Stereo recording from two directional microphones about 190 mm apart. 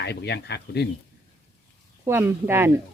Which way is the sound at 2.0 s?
15° right (ahead or behind).